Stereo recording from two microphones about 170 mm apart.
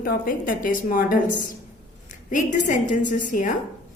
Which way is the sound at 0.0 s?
60° left (ahead or behind).